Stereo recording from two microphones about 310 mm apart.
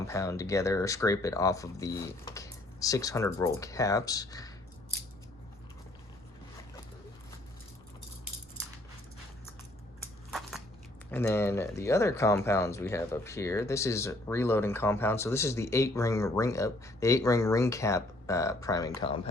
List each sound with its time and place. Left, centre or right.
0.1 s speech: centre
11.1 s speech: centre